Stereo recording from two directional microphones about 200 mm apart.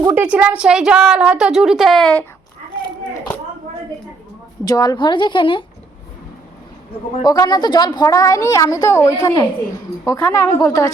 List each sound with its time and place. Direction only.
0.0 s a woman's voice: 10° right (ahead or behind)
4.6 s a woman's voice: 20° left (ahead or behind)
7.3 s a woman's voice: 20° left (ahead or behind)